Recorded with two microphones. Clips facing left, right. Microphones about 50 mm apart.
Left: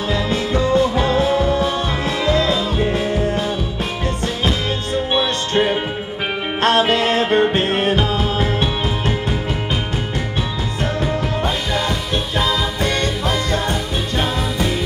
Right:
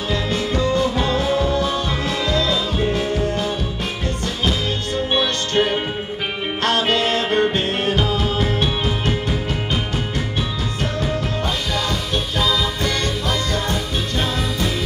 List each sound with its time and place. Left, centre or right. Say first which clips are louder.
0.1 s music: left 2 dB; left
5.5 s music: left 2 dB; left
10.8 s music: left 3 dB; centre
12.4 s music: left 1 dB; left